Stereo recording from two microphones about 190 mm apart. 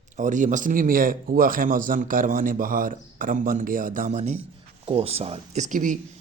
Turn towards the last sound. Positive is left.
turn(degrees=-40)  # may be behind; listen again after turning